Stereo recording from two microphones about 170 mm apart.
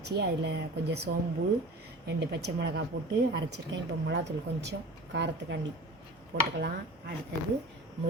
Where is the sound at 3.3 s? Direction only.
85° right.